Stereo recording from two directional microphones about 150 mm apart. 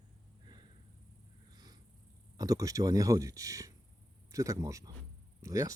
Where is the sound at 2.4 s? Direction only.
25° right (ahead or behind).